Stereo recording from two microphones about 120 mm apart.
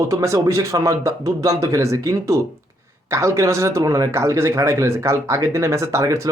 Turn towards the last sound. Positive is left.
turn(degrees=-25)  # may be behind; listen again after turning